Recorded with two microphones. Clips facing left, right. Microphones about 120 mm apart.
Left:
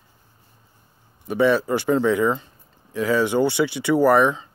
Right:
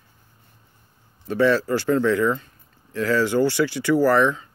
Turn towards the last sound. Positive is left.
turn(degrees=20)  # may be behind; listen again after turning